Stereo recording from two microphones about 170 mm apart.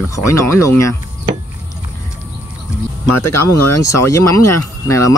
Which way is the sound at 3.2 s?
15° left (ahead or behind).